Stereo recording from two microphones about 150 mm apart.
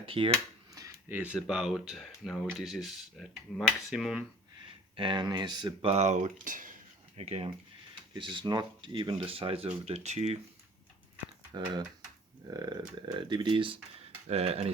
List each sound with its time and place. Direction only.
0.0 s speech: 35° right (ahead or behind)
0.7 s a sound: 25° right (ahead or behind)
1.1 s speech: 10° right (ahead or behind)
4.9 s speech: 30° right (ahead or behind)
5.9 s speech: 50° right (ahead or behind)
7.2 s speech: 40° right (ahead or behind)
11.5 s speech: 30° right (ahead or behind)
14.3 s speech: 45° right (ahead or behind)